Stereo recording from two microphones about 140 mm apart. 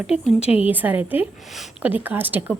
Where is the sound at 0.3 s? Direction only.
45° left (ahead or behind).